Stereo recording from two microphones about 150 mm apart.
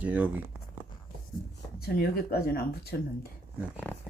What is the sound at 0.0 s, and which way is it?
Speech, 10° right (ahead or behind).